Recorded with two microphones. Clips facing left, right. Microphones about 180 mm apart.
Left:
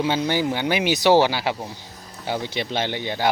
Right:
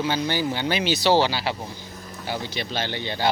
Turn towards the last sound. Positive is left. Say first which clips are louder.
# left 2 dB
turn(degrees=15)  # may be behind; listen again after turning